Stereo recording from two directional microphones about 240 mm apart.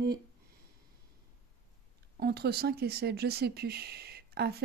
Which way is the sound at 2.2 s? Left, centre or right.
Right.